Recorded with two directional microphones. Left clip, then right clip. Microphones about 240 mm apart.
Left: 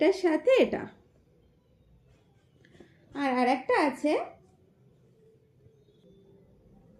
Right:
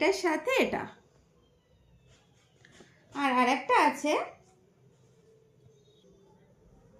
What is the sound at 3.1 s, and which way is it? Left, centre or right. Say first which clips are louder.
A woman's voice: even; centre.